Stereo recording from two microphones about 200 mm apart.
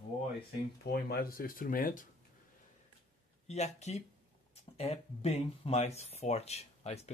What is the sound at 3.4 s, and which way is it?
Speech, 35° left (ahead or behind).